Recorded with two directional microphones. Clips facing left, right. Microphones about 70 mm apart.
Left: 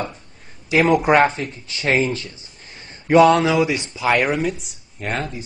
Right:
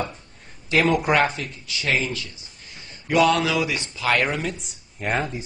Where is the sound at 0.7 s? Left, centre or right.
Centre.